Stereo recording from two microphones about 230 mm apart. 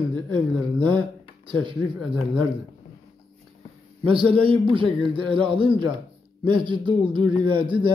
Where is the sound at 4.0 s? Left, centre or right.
Right.